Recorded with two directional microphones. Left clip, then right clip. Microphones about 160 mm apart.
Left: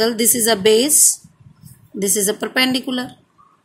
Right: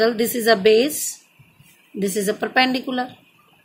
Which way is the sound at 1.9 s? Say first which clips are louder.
Left 2 dB; 65° left (ahead or behind).